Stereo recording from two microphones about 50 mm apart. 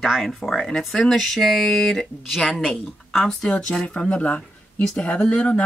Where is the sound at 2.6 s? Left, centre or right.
Centre; by 5.6 s left.